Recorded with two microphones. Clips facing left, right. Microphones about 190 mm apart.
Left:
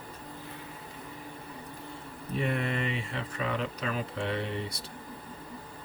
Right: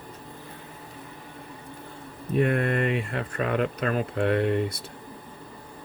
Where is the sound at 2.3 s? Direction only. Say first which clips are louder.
Right 7 dB; 55° right (ahead or behind).